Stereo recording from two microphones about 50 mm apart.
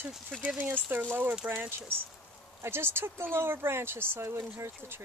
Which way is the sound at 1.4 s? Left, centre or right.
Right.